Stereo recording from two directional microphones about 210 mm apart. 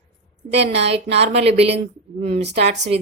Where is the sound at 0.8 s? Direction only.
30° right (ahead or behind).